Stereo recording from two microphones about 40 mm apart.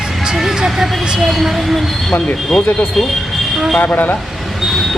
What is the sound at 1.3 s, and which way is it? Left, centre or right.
Speech, centre.